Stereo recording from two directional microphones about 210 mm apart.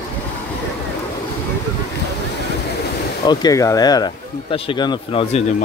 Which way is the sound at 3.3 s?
15° left (ahead or behind).